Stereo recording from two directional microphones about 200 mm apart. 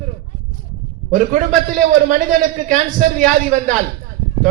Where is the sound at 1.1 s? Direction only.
40° right (ahead or behind).